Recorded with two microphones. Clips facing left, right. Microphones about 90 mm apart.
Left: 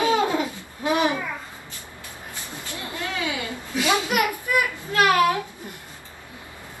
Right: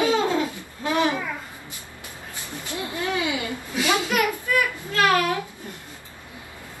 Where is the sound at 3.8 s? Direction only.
20° left (ahead or behind).